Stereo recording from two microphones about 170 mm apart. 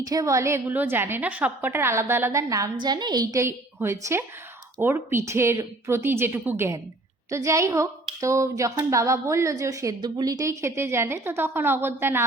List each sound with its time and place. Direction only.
0.0 s a woman's voice: 20° right (ahead or behind)